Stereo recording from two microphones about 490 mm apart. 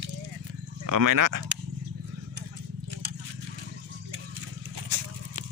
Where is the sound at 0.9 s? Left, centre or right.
Right.